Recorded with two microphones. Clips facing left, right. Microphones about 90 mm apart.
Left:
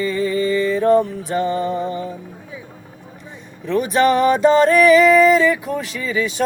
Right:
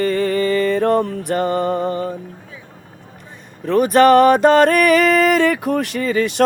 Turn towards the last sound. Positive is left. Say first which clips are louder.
# right 4 dB
turn(degrees=-60)  # may be behind; listen again after turning